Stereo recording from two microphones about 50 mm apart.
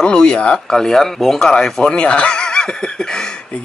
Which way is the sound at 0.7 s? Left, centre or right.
Centre.